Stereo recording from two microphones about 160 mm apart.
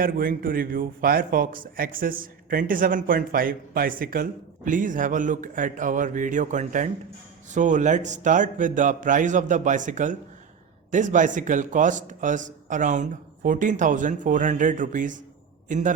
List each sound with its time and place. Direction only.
0.0 s a man's voice: 60° right (ahead or behind)